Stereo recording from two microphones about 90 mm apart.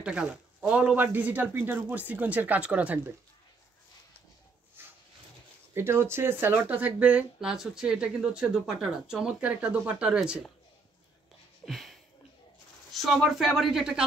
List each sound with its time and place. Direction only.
0.0 s speech: 10° right (ahead or behind)
4.8 s dog: 25° right (ahead or behind)
5.8 s speech: 30° right (ahead or behind); by 10.4 s 10° right (ahead or behind)
11.6 s a sound: centre (ahead or behind)
12.9 s speech: centre (ahead or behind)